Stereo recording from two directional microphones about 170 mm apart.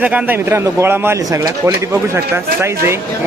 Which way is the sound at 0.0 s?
10° right (ahead or behind).